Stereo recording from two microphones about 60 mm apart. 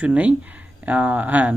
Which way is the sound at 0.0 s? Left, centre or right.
Right.